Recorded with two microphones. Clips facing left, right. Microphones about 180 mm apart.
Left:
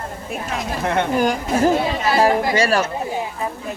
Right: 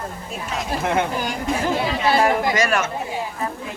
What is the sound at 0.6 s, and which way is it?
Speech, centre (ahead or behind).